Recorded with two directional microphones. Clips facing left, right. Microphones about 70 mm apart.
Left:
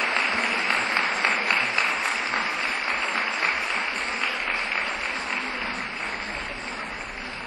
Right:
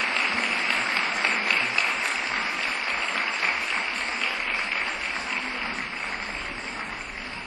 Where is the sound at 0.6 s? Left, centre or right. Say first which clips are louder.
Left 2 dB; left.